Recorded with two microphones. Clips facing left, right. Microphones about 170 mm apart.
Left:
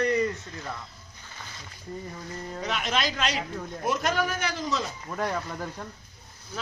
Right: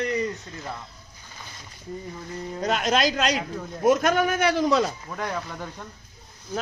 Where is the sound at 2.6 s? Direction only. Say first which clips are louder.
Right 6 dB; 40° right (ahead or behind); by 4.8 s 60° right (ahead or behind).